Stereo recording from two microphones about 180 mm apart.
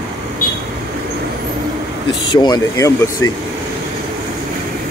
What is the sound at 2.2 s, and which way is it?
Speech, 25° left (ahead or behind).